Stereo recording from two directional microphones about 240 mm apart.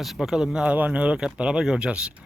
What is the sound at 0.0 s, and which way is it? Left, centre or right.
Speech, centre.